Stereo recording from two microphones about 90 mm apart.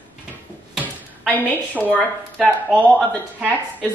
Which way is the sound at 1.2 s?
20° left (ahead or behind).